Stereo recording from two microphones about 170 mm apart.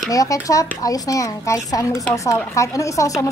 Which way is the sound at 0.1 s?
20° left (ahead or behind).